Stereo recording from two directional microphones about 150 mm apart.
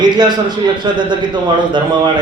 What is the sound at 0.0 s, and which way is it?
Speech, 30° right (ahead or behind).